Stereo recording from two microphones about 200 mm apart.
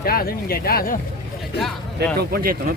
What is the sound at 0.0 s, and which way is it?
Speech, 50° left (ahead or behind).